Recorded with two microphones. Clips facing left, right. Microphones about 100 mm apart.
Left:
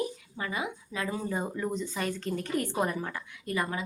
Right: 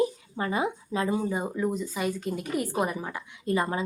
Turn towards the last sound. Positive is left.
turn(degrees=-30)  # may be behind; listen again after turning